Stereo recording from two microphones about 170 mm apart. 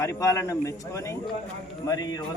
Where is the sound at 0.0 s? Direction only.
15° left (ahead or behind).